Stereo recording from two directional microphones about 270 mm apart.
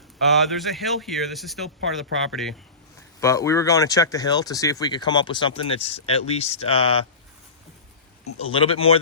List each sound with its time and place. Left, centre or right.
0.2 s speech: centre
3.2 s speech: centre
8.5 s speech: left